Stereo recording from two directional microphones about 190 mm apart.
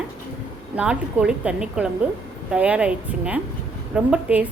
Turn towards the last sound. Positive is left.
turn(degrees=-5)  # may be behind; listen again after turning